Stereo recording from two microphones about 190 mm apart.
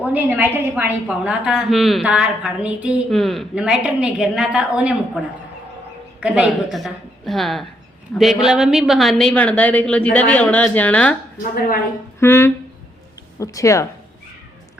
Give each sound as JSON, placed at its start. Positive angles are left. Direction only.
{"t": 0.0, "sound": "a woman's voice", "side_deg": -10}
{"t": 12.2, "sound": "a woman's voice", "side_deg": 15}